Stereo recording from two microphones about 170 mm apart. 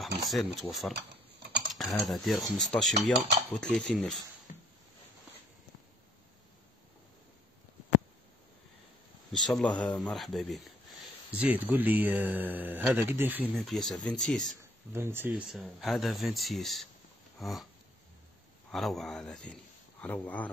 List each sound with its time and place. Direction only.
0.0 s speech: centre (ahead or behind)
9.3 s speech: centre (ahead or behind)
13.6 s speech: centre (ahead or behind)
14.6 s speech: 15° right (ahead or behind)
15.5 s speech: centre (ahead or behind)
17.4 s dog: centre (ahead or behind)
18.7 s a man's voice: centre (ahead or behind)